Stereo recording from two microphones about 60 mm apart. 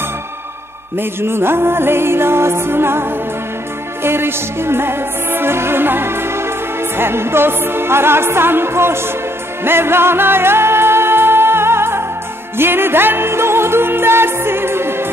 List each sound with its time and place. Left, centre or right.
0.9 s music: right